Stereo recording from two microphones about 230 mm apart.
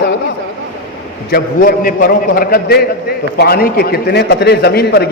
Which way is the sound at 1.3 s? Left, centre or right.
Left.